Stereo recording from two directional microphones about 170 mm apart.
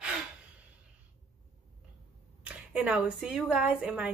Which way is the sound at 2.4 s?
5° right (ahead or behind).